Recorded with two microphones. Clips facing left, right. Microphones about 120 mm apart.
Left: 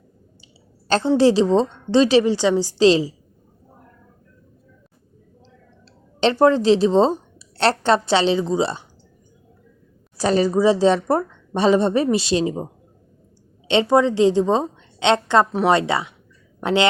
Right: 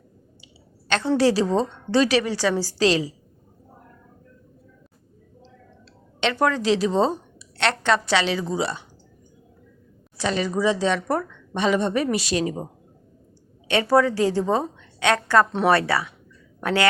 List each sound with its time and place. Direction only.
0.9 s a woman's voice: 30° left (ahead or behind)
6.1 s a woman's voice: 30° left (ahead or behind)
10.2 s a woman's voice: 40° left (ahead or behind)
13.7 s a woman's voice: 20° left (ahead or behind)